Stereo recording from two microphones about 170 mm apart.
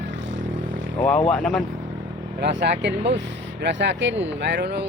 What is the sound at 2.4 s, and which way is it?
Speech, 90° right.